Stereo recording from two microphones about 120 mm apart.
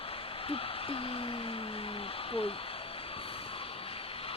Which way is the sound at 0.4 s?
50° left (ahead or behind).